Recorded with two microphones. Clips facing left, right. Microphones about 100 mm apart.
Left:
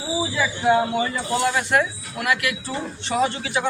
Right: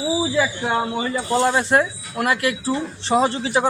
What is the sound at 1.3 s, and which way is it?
Speech, 30° right (ahead or behind).